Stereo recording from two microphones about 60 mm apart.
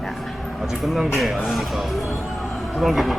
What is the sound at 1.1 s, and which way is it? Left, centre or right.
Speech, centre.